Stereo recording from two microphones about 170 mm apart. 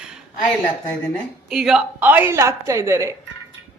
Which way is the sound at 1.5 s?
5° right (ahead or behind).